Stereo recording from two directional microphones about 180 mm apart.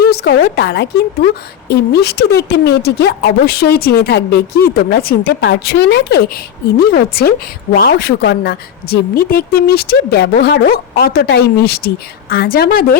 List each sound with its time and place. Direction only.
0.0 s a woman's voice: 60° left (ahead or behind)